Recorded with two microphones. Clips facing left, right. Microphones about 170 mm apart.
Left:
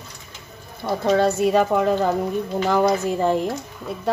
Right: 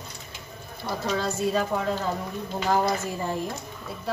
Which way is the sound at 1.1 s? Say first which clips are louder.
Left 9 dB; 65° left (ahead or behind).